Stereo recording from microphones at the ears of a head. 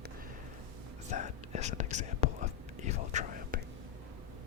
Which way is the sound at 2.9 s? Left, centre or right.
Left.